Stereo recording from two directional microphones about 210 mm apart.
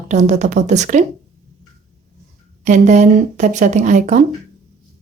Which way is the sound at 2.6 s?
35° right (ahead or behind).